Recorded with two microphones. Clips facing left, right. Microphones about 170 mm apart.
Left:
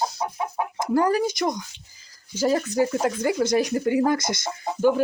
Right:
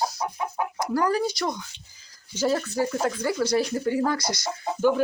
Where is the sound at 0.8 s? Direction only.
25° left (ahead or behind).